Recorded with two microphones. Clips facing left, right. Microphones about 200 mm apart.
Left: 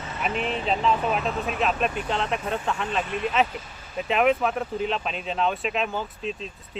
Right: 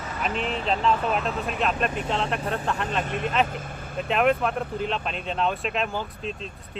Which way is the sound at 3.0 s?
40° right (ahead or behind).